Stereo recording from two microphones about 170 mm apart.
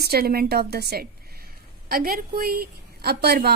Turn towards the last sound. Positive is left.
turn(degrees=-70)  # may be behind; listen again after turning